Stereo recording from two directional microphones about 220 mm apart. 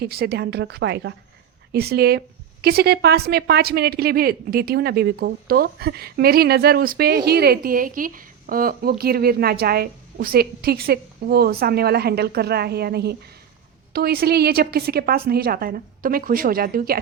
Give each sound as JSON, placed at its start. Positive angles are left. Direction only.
{"t": 0.0, "sound": "a woman's voice", "side_deg": -45}